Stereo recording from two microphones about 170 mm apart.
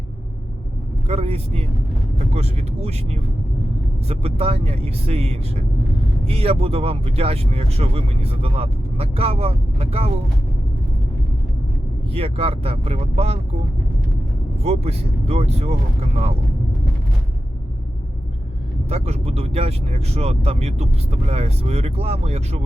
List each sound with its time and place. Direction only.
1.0 s speech: 35° right (ahead or behind)
12.1 s speech: 35° right (ahead or behind)
14.6 s speech: 40° right (ahead or behind)
18.9 s speech: 40° right (ahead or behind)